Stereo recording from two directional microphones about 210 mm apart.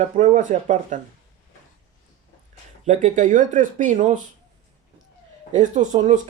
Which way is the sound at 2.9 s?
35° right (ahead or behind).